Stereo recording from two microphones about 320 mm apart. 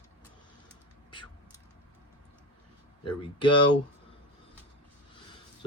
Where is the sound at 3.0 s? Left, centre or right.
Centre.